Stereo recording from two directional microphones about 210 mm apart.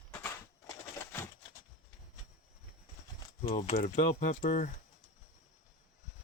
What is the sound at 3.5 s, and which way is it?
Speech, 35° left (ahead or behind).